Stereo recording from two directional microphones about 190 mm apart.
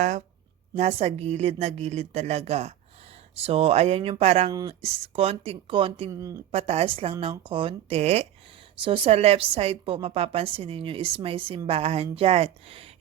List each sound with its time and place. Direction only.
0.8 s a woman's voice: 35° right (ahead or behind)
6.1 s speech: 15° right (ahead or behind)
6.5 s a woman's voice: 35° right (ahead or behind)